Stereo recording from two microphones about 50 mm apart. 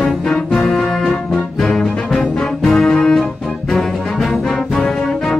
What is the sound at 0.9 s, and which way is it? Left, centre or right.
Brass instrument, centre.